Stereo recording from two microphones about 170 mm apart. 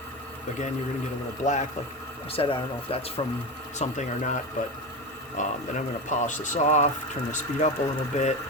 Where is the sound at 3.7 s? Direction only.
45° left (ahead or behind).